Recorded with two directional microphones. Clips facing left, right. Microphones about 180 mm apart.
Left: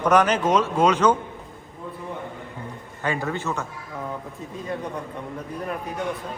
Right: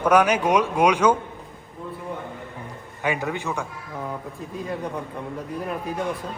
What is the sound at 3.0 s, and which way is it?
Speech, 15° right (ahead or behind).